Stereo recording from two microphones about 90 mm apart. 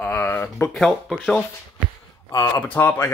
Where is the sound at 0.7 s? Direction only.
5° left (ahead or behind).